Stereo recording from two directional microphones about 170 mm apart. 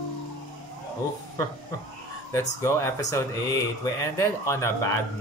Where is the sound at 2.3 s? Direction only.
15° left (ahead or behind).